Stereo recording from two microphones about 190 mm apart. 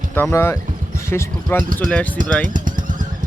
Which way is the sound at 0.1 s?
15° left (ahead or behind).